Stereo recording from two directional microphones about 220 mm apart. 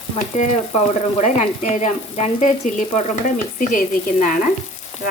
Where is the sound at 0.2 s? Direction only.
30° left (ahead or behind).